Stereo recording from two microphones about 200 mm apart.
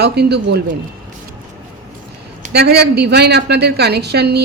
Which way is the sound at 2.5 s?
55° right (ahead or behind).